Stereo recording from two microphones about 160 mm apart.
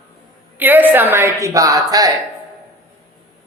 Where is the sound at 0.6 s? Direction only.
10° right (ahead or behind).